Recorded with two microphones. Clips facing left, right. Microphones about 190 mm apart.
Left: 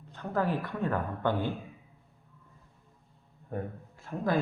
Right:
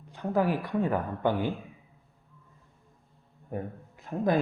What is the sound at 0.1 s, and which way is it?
Speech, 10° right (ahead or behind).